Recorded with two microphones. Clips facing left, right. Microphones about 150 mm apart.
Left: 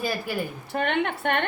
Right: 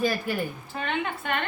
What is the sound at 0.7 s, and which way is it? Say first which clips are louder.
Speech: left 8 dB; 65° left (ahead or behind).